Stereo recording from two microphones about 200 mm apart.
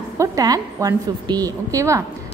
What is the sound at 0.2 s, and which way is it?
A woman's voice, 15° right (ahead or behind).